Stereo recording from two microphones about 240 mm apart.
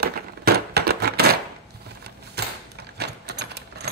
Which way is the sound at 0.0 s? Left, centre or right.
Right.